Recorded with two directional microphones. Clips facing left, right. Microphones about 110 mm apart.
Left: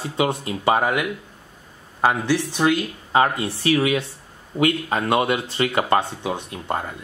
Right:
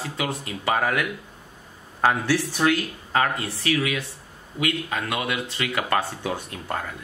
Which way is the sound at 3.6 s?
30° left (ahead or behind).